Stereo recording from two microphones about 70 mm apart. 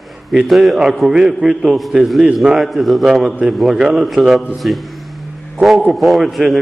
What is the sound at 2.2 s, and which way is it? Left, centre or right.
A man's voice, centre.